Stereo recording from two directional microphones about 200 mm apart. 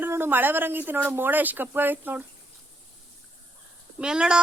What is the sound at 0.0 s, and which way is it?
Speech, 10° right (ahead or behind).